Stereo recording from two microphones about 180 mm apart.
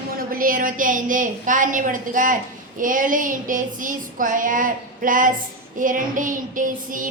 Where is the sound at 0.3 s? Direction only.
50° right (ahead or behind).